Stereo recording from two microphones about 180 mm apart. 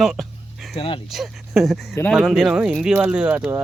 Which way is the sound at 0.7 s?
30° left (ahead or behind).